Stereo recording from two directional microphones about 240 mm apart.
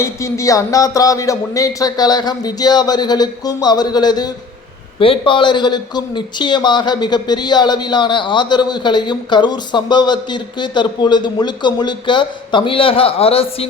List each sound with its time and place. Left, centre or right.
0.0 s a man's voice: centre